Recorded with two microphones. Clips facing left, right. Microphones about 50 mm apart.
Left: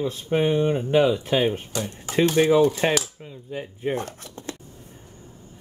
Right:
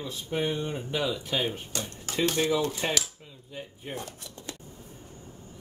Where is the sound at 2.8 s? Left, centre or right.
Left.